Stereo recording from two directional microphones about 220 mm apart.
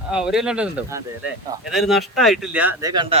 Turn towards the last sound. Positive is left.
turn(degrees=-20)  # may be behind; listen again after turning